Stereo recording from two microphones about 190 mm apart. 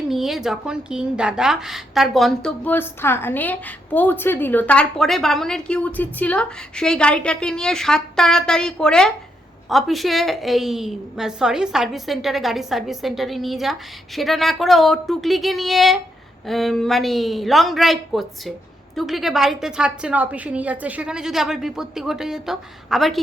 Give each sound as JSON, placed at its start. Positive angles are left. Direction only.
{"t": 0.1, "sound": "speech", "side_deg": 0}